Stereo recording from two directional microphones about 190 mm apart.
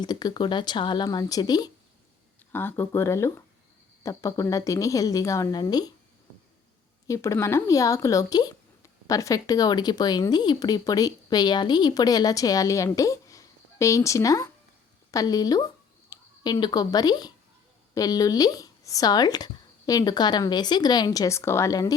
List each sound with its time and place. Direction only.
0.0 s a woman's voice: 20° left (ahead or behind)
7.1 s speech: 15° left (ahead or behind)